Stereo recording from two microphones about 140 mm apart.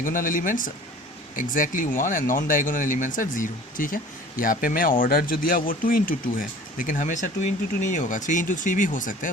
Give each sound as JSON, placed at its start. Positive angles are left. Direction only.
{"t": 0.0, "sound": "speech", "side_deg": 75}